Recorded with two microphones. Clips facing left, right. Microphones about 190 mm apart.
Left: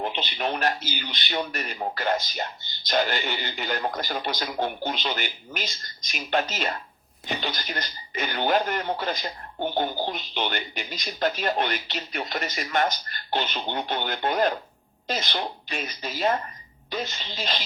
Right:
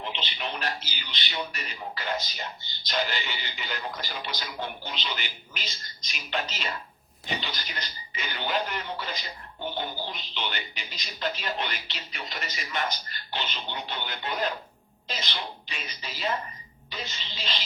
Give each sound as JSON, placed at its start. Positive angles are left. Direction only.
{"t": 0.0, "sound": "speech", "side_deg": 50}